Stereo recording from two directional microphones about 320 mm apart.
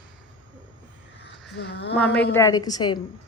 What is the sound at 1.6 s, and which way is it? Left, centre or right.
Speech, left.